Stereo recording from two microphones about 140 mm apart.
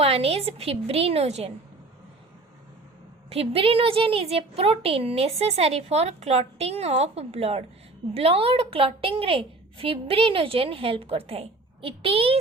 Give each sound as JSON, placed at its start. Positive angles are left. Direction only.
{"t": 0.0, "sound": "a woman's voice", "side_deg": -45}
{"t": 3.2, "sound": "a woman's voice", "side_deg": -45}